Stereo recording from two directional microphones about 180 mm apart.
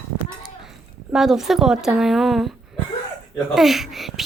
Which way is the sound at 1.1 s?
Centre (ahead or behind).